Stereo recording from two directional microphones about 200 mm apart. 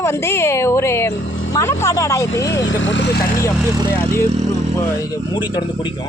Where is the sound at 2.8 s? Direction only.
60° left (ahead or behind).